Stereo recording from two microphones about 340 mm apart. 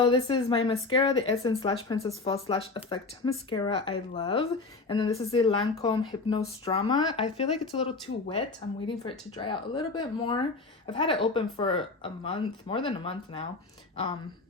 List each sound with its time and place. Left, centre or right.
0.0 s speech: centre